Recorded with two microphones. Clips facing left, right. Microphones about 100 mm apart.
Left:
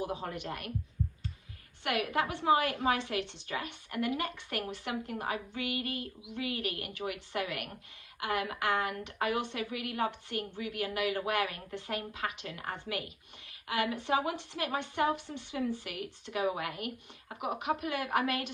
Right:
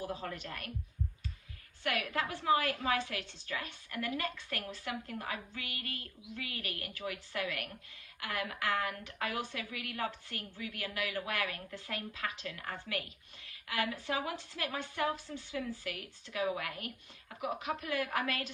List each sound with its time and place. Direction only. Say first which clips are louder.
0.0 s a woman's voice: left 4 dB; 20° left (ahead or behind)
1.8 s a woman's voice: left 4 dB; 20° left (ahead or behind)